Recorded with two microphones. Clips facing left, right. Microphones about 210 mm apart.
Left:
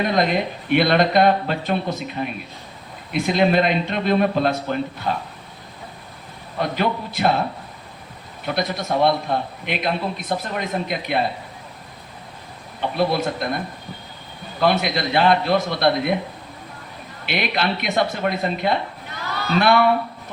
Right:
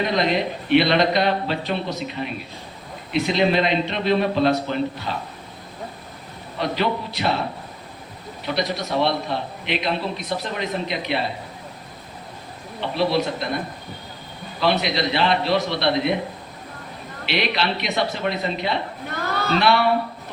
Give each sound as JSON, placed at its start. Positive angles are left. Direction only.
{"t": 0.0, "sound": "a man's voice", "side_deg": 50}
{"t": 6.6, "sound": "a man's voice", "side_deg": 50}
{"t": 8.5, "sound": "a man's voice", "side_deg": 50}
{"t": 12.8, "sound": "a man's voice", "side_deg": 50}
{"t": 14.6, "sound": "a man's voice", "side_deg": 50}
{"t": 17.2, "sound": "a man's voice", "side_deg": 50}
{"t": 19.1, "sound": "a sound", "side_deg": -50}
{"t": 19.5, "sound": "a man's voice", "side_deg": 50}